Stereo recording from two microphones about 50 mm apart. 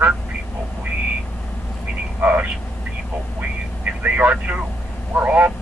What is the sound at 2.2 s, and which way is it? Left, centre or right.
Speech, right.